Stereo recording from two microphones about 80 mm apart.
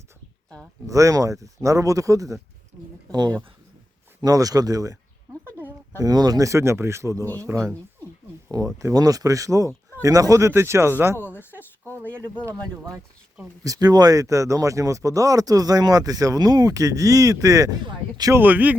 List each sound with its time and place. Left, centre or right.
0.9 s speech: right
3.1 s speech: right
4.2 s speech: right
6.0 s speech: right
8.4 s speech: right
11.2 s speech: left
13.7 s speech: right
18.3 s speech: right